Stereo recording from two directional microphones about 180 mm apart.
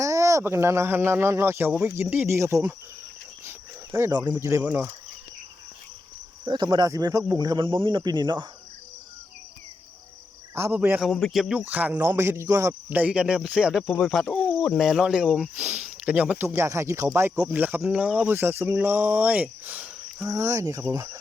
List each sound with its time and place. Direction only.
0.0 s speech: 15° right (ahead or behind)
3.9 s speech: 20° right (ahead or behind)
6.4 s speech: 25° right (ahead or behind)
10.5 s speech: 10° right (ahead or behind)